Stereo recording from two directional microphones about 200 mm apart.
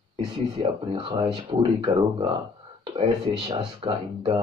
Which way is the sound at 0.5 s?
25° right (ahead or behind).